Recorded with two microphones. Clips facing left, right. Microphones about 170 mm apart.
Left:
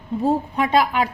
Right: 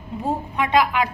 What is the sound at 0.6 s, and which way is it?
Speech, 40° left (ahead or behind).